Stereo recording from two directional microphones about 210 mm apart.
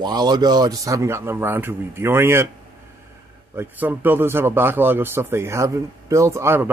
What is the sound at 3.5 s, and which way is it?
Speech, 10° right (ahead or behind).